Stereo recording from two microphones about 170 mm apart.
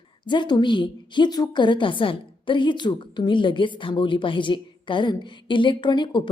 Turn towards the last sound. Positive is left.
turn(degrees=30)  # may be behind; listen again after turning